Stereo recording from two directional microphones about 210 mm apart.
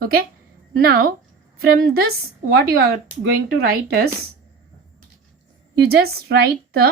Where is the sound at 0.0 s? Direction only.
45° right (ahead or behind).